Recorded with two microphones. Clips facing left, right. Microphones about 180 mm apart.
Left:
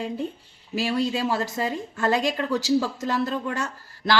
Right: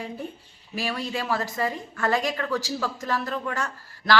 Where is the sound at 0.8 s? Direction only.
25° left (ahead or behind).